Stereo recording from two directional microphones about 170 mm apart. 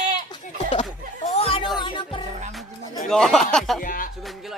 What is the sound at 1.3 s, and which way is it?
Music, 35° left (ahead or behind).